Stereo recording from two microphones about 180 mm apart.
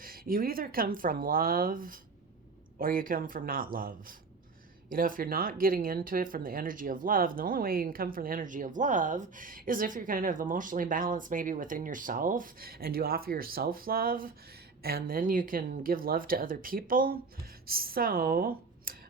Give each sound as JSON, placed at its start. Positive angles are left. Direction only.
{"t": 0.0, "sound": "speech", "side_deg": -55}